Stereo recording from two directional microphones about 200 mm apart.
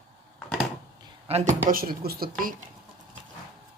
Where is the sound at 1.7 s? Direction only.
45° right (ahead or behind).